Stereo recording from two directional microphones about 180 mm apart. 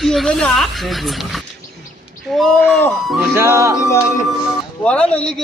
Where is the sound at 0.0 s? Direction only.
Centre (ahead or behind).